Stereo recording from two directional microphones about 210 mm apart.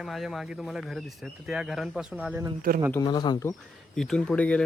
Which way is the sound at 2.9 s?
20° left (ahead or behind).